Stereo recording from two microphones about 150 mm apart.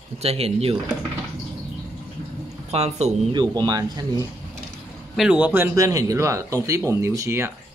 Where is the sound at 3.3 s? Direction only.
30° right (ahead or behind).